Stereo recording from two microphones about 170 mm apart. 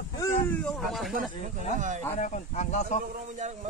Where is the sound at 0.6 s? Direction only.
Centre (ahead or behind).